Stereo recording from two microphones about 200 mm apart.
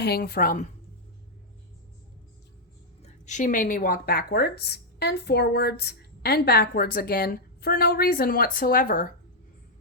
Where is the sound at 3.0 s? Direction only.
35° left (ahead or behind).